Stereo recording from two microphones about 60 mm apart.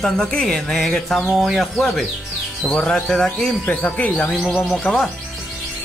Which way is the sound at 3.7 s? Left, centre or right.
Left.